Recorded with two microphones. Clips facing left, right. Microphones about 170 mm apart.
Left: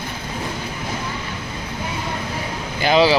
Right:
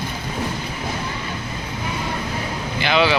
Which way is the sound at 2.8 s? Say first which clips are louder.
Left 3 dB; 40° left (ahead or behind).